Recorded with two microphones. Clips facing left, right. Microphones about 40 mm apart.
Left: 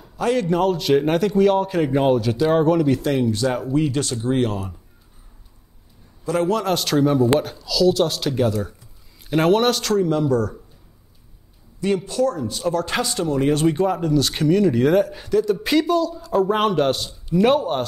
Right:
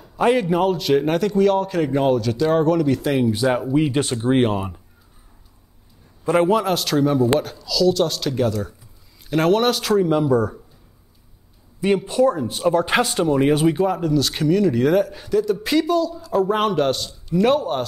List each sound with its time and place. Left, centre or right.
0.2 s speech: centre
3.0 s speech: centre; by 4.8 s right
6.2 s a man's voice: right
6.6 s speech: centre
11.8 s speech: right
13.6 s speech: centre